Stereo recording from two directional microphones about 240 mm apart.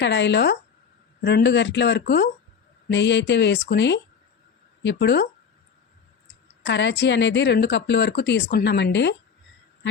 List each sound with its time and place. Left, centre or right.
0.0 s a woman's voice: left
6.7 s a woman's voice: left